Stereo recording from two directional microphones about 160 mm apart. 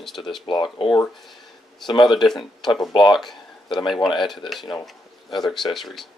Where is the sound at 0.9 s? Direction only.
Centre (ahead or behind).